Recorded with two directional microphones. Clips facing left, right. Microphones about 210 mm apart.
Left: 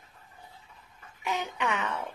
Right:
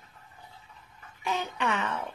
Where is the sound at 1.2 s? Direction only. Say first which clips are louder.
Right 1 dB; 15° left (ahead or behind).